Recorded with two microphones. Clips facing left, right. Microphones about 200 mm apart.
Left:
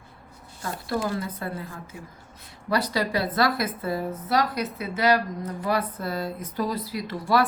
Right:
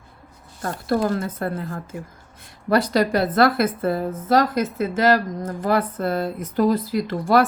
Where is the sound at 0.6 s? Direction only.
50° right (ahead or behind).